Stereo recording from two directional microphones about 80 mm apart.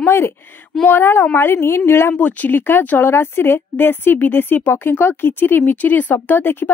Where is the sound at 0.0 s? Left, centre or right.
Left.